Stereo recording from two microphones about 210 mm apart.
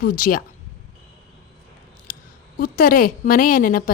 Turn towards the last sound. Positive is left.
turn(degrees=40)  # may be behind; listen again after turning